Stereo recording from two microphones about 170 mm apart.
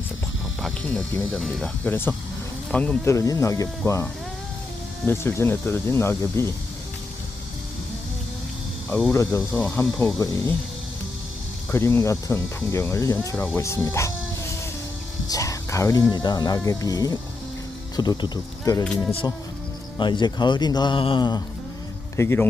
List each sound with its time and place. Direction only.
0.6 s speech: 5° left (ahead or behind)
9.1 s speech: 15° left (ahead or behind)
11.7 s speech: 15° left (ahead or behind)
15.3 s whispering: 20° left (ahead or behind)
16.1 s a man's voice: 25° left (ahead or behind)
20.0 s a man's voice: 25° left (ahead or behind)